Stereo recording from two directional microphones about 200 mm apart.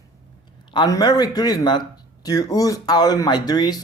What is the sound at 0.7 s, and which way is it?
Speech, 20° left (ahead or behind).